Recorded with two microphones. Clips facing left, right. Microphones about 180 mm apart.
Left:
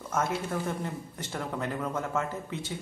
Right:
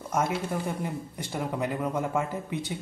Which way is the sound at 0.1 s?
10° right (ahead or behind).